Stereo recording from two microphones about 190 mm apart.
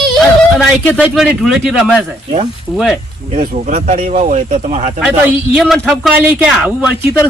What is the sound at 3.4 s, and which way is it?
Speech, 40° right (ahead or behind).